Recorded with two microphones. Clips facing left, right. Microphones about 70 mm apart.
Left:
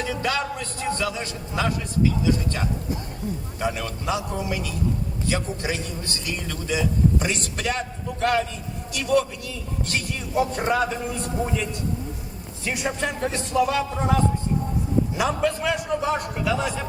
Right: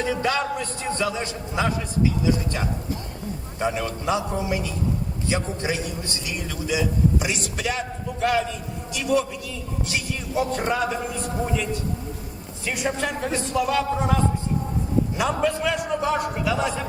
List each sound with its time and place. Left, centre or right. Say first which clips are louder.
0.0 s a man's voice: right 2 dB; right
6.2 s a man's voice: even; centre
10.4 s a man's voice: left 1 dB; centre